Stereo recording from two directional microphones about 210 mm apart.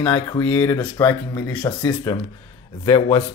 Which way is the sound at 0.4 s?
15° left (ahead or behind).